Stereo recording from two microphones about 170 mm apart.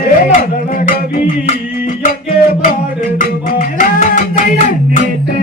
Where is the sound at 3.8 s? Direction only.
50° left (ahead or behind).